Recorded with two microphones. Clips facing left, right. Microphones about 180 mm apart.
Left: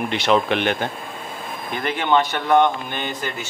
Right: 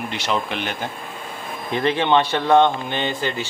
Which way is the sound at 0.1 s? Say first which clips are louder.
Left 7 dB; 60° left (ahead or behind).